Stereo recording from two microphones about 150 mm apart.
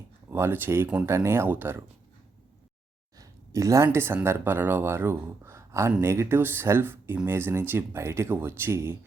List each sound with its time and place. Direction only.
0.3 s speech: 15° right (ahead or behind)
3.2 s a sound: 20° right (ahead or behind)
3.8 s speech: 15° right (ahead or behind)